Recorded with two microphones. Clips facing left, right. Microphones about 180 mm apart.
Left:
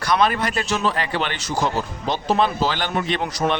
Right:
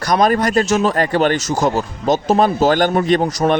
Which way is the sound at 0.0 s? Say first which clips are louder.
Right 5 dB; 40° right (ahead or behind).